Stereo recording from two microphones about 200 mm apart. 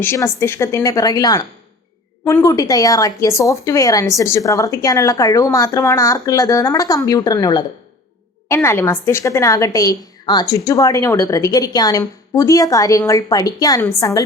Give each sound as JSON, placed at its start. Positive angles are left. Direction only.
{"t": 0.0, "sound": "a woman's voice", "side_deg": 10}